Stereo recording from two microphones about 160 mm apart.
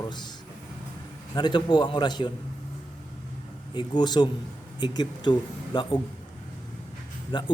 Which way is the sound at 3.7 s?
25° left (ahead or behind).